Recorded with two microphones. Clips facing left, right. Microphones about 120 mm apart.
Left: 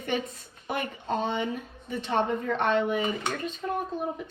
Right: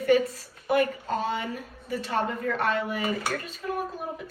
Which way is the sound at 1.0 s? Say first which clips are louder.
Even; 25° left (ahead or behind).